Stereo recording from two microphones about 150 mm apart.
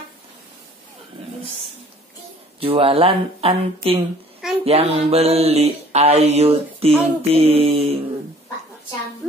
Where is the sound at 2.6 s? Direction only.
40° right (ahead or behind).